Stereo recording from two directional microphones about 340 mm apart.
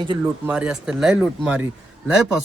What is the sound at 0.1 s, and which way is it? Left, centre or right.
Speech, centre.